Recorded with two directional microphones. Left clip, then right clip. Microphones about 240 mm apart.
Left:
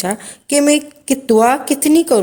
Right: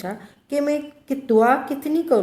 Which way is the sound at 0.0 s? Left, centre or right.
Left.